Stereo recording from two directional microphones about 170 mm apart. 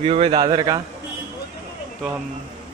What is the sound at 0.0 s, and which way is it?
Speech, 35° right (ahead or behind).